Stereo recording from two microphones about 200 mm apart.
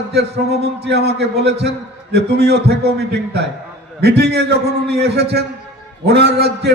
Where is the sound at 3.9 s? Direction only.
55° right (ahead or behind).